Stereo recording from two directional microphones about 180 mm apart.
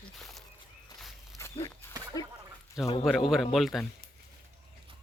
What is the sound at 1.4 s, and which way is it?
Walk, 15° left (ahead or behind).